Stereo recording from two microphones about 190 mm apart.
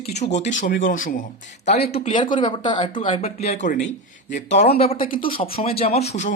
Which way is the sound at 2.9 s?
40° left (ahead or behind).